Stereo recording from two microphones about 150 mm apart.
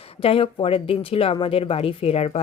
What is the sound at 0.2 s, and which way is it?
Speech, 40° left (ahead or behind).